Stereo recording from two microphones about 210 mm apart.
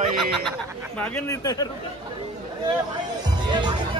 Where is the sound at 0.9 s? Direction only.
5° left (ahead or behind).